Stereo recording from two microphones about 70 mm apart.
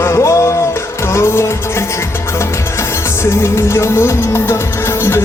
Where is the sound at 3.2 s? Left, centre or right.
Left.